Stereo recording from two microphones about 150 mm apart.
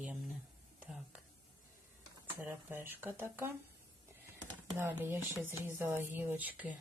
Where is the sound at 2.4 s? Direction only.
15° right (ahead or behind).